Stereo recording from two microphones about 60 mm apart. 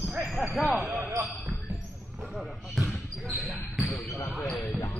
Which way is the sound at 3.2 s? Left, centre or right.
Centre.